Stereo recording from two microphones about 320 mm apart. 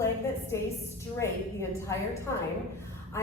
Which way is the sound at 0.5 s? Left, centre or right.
Centre.